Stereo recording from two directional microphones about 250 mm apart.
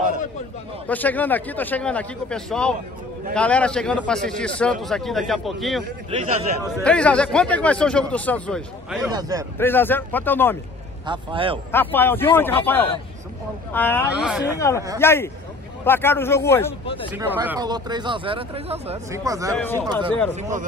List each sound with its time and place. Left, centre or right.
0.8 s a man's voice: centre
6.0 s a man's voice: right
6.8 s speech: centre
9.1 s speech: centre
9.6 s a man's voice: centre
11.1 s a man's voice: centre
11.7 s a man's voice: centre
14.2 s speech: centre
15.0 s a man's voice: centre
16.8 s speech: left
17.1 s speech: centre
19.5 s speech: centre
19.9 s a man's voice: centre